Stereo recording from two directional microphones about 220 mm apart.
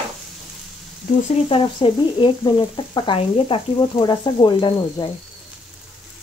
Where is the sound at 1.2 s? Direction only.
30° left (ahead or behind).